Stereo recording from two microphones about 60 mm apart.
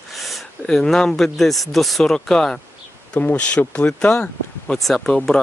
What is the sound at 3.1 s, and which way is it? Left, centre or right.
Speech, left.